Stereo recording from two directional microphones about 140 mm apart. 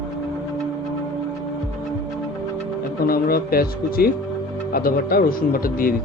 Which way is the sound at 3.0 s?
90° left.